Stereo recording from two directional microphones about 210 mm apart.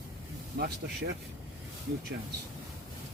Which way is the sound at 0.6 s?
50° right (ahead or behind).